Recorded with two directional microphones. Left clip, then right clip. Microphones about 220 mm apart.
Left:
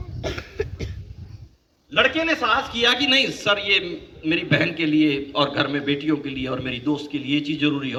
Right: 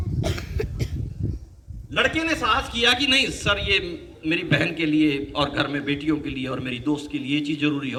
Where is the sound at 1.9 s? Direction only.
10° right (ahead or behind).